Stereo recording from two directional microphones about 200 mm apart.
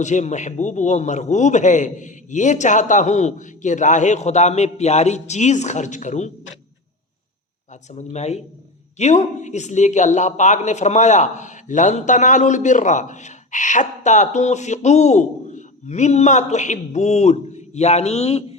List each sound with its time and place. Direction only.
0.0 s speech: 35° left (ahead or behind)
7.9 s speech: 35° left (ahead or behind)